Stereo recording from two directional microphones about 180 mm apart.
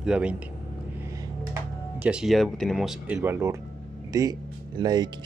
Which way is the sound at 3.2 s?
15° right (ahead or behind).